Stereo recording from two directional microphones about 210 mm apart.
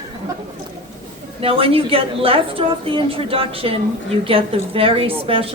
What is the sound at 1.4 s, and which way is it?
A woman's voice, 25° right (ahead or behind).